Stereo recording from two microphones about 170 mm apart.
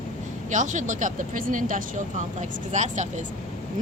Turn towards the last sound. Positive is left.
turn(degrees=-45)  # may be behind; listen again after turning